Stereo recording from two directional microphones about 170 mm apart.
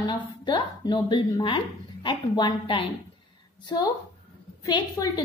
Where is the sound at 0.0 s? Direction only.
25° left (ahead or behind).